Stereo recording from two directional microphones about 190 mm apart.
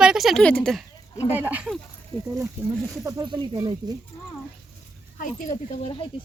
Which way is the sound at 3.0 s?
25° right (ahead or behind).